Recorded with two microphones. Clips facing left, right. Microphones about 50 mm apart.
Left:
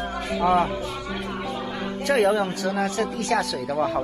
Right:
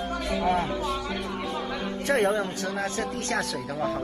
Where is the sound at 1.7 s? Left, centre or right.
Left.